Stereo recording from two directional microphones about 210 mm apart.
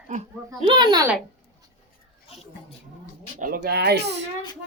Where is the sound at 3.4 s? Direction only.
45° right (ahead or behind).